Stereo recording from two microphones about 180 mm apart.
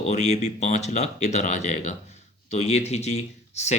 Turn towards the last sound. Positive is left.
turn(degrees=40)  # may be behind; listen again after turning